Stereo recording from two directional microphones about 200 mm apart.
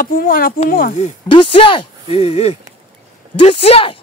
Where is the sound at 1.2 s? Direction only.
25° left (ahead or behind).